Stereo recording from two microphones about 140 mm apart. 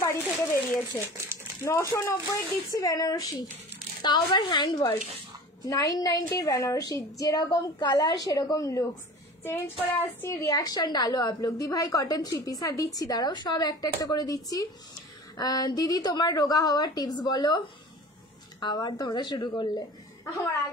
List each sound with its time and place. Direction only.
0.0 s a woman's voice: 20° left (ahead or behind)
1.0 s speech: 15° right (ahead or behind)
1.6 s a woman's voice: 20° left (ahead or behind)